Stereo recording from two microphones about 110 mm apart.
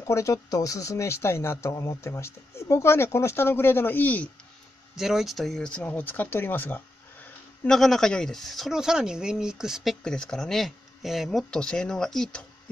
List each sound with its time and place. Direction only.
0.0 s speech: 30° left (ahead or behind)
4.9 s speech: 5° right (ahead or behind); by 7.7 s 15° left (ahead or behind)
7.7 s speech: 5° left (ahead or behind)